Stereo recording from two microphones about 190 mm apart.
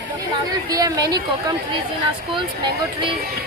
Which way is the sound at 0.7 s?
20° right (ahead or behind).